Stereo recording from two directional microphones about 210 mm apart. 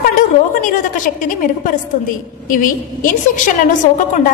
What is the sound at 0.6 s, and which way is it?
Speech, 40° left (ahead or behind).